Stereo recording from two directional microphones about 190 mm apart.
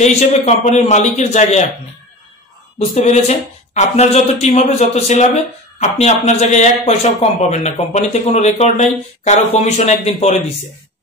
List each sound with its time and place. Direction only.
0.0 s speech: 35° left (ahead or behind)
2.9 s speech: 35° left (ahead or behind)